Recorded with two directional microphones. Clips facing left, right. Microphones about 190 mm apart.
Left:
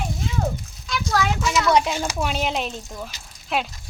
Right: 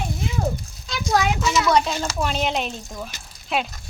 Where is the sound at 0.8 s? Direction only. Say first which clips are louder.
Right 2 dB; 15° right (ahead or behind).